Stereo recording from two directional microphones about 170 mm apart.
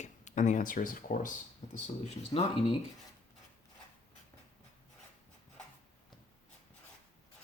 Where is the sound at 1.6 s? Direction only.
40° left (ahead or behind).